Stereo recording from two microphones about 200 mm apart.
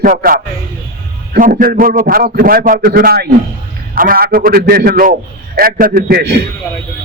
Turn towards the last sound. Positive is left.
turn(degrees=-55)  # may be behind; listen again after turning